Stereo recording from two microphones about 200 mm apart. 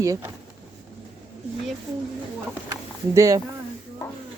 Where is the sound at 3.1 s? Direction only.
15° right (ahead or behind).